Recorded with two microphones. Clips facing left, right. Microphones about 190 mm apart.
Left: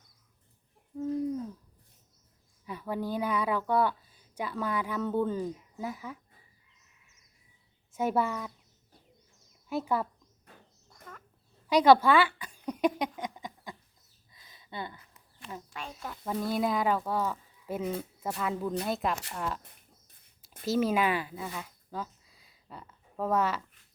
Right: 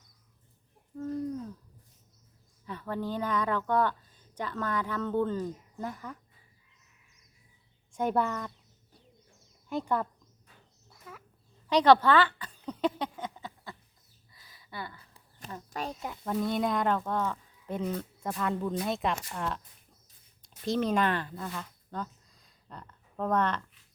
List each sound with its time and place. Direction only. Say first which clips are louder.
0.9 s a sound: left 3 dB; 10° left (ahead or behind)
2.6 s a woman's voice: left 1 dB; 10° left (ahead or behind)
7.9 s speech: even; 5° left (ahead or behind)
9.6 s speech: even; 5° left (ahead or behind)
10.8 s a sound: right 1 dB; 5° right (ahead or behind)
11.7 s a sound: left 1 dB; 10° left (ahead or behind)
15.7 s speech: right 10 dB; 40° right (ahead or behind)
16.2 s speech: even; 5° left (ahead or behind)
20.7 s speech: left 1 dB; 5° left (ahead or behind)